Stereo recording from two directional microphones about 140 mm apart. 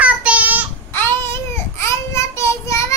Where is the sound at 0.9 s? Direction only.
15° left (ahead or behind).